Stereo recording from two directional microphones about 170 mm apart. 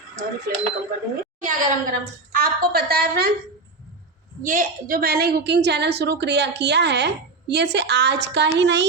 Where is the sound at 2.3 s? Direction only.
60° right (ahead or behind).